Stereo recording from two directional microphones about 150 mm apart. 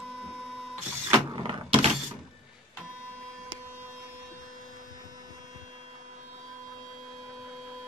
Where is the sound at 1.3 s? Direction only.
35° right (ahead or behind).